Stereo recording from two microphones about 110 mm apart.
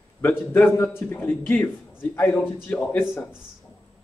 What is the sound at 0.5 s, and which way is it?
A man's voice, 20° left (ahead or behind).